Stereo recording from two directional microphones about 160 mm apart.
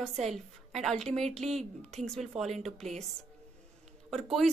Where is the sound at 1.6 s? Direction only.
45° right (ahead or behind).